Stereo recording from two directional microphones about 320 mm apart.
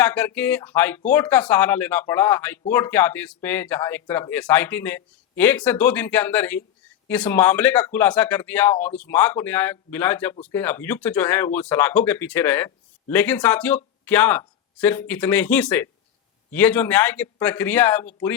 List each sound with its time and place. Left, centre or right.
0.0 s speech: centre